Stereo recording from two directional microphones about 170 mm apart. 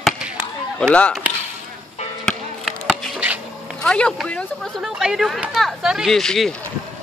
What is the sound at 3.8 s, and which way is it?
Speech, 5° left (ahead or behind).